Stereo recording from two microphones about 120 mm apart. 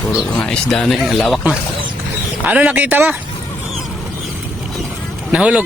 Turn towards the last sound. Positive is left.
turn(degrees=-10)  # may be behind; listen again after turning